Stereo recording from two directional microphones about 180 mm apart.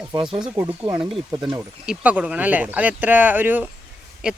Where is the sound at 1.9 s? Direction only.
5° right (ahead or behind).